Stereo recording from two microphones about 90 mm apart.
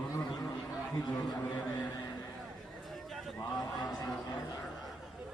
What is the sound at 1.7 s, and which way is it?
Speech, 45° left (ahead or behind).